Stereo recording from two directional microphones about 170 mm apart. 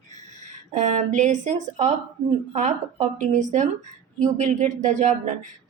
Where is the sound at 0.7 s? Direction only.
45° right (ahead or behind).